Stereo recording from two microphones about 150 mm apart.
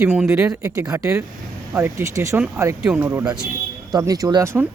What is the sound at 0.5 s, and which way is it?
Speech, 20° right (ahead or behind).